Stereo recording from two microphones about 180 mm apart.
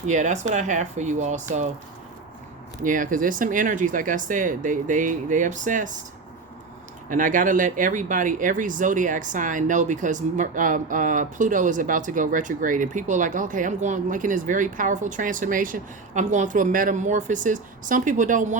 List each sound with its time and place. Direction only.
0.1 s speech: 40° right (ahead or behind)
2.8 s speech: 45° right (ahead or behind)
7.1 s speech: 45° right (ahead or behind)